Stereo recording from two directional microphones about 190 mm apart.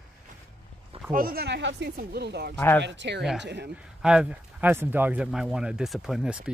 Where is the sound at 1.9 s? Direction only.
60° right (ahead or behind).